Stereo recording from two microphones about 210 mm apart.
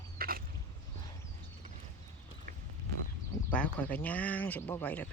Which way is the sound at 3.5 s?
5° left (ahead or behind).